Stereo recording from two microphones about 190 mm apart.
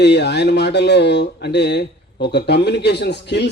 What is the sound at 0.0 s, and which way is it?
Speech, 65° left (ahead or behind).